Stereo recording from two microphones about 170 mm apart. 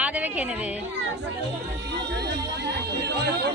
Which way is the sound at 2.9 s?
75° right (ahead or behind).